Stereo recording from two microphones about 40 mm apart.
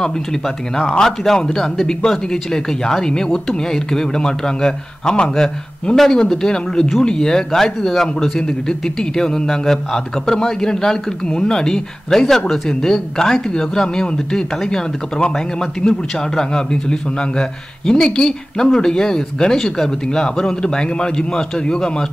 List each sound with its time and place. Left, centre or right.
0.0 s a man's voice: centre